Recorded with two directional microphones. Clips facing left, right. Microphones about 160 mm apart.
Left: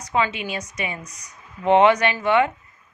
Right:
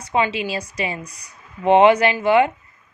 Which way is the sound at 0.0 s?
25° right (ahead or behind).